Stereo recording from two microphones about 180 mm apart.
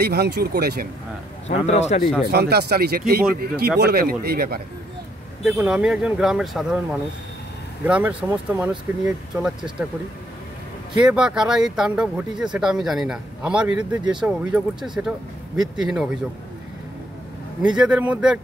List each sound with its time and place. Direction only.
0.0 s speech: 60° right (ahead or behind)
1.7 s speech: 40° left (ahead or behind)
2.3 s speech: 60° right (ahead or behind)
5.4 s speech: 5° right (ahead or behind)
11.0 s speech: 5° right (ahead or behind)
17.7 s speech: 5° right (ahead or behind)